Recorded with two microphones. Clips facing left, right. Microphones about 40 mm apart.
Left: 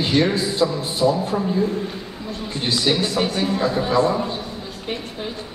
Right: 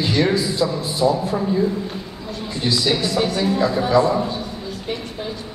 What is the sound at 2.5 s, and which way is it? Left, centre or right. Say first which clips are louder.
A man's voice: right 1 dB; left.